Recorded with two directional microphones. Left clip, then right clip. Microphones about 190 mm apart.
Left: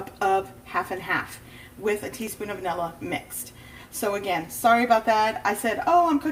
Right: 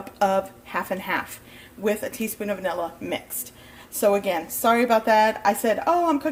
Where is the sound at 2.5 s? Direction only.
50° right (ahead or behind).